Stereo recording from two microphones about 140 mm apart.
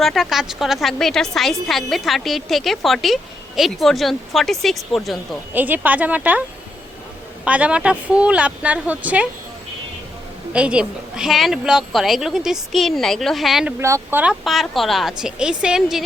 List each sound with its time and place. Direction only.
0.0 s a woman's voice: centre (ahead or behind)
5.5 s a woman's voice: 10° right (ahead or behind)
7.4 s a woman's voice: 10° right (ahead or behind)
10.5 s a woman's voice: 5° right (ahead or behind)
13.7 s a woman's voice: 20° right (ahead or behind)
14.4 s a woman's voice: centre (ahead or behind)